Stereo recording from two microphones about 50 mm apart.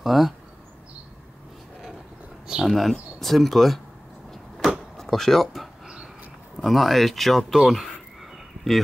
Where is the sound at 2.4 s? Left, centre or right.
Centre.